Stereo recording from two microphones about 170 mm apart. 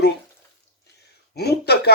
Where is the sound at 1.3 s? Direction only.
70° left (ahead or behind).